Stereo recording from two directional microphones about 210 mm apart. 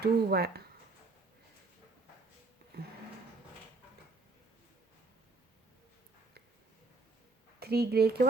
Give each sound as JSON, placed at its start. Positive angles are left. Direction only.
{"t": 0.0, "sound": "speech", "side_deg": -50}
{"t": 7.6, "sound": "speech", "side_deg": -50}